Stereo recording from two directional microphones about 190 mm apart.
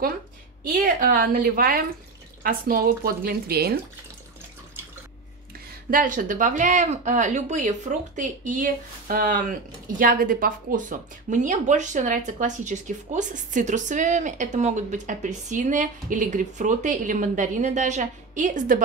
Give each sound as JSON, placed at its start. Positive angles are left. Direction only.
{"t": 0.7, "sound": "speech", "side_deg": -50}
{"t": 5.9, "sound": "speech", "side_deg": -45}